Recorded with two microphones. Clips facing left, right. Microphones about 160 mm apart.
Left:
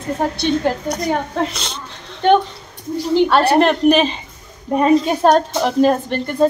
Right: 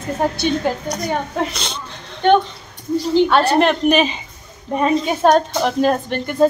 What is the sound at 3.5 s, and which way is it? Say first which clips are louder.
A woman's voice: left 2 dB; centre (ahead or behind).